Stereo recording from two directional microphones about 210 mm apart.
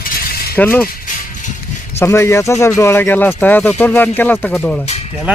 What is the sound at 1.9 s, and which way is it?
Speech, 15° left (ahead or behind).